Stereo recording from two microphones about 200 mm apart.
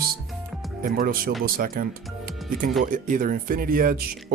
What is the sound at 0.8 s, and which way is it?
Speech, 45° right (ahead or behind).